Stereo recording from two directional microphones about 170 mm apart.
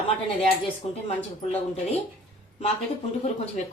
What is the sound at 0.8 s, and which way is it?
Speech, 35° left (ahead or behind).